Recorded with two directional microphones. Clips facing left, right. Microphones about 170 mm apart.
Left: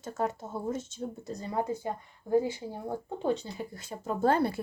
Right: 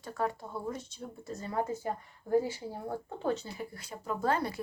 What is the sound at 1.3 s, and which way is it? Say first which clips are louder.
A woman's voice: left 1 dB; 20° left (ahead or behind).